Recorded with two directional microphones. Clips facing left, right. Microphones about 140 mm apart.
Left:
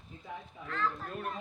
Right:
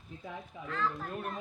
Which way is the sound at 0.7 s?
Centre (ahead or behind).